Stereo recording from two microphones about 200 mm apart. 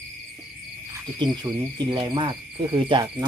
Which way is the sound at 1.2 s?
20° right (ahead or behind).